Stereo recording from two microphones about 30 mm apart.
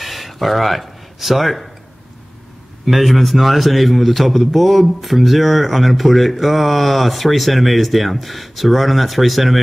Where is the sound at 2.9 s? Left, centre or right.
Centre.